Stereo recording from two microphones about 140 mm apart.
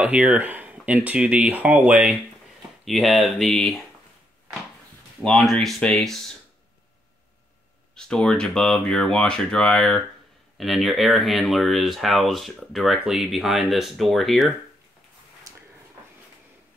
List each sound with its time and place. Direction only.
0.0 s speech: 5° right (ahead or behind)
5.2 s speech: centre (ahead or behind)
7.9 s speech: 5° left (ahead or behind)
15.5 s a sound: 25° right (ahead or behind)